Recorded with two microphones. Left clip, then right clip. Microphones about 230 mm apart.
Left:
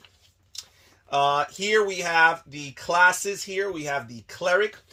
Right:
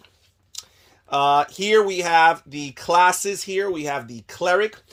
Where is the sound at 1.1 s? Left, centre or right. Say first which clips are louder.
Right 4 dB; right.